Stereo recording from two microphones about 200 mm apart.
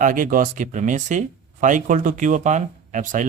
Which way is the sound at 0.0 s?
40° right (ahead or behind).